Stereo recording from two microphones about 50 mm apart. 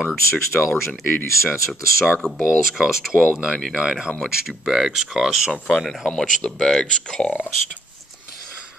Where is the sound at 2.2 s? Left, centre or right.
Centre.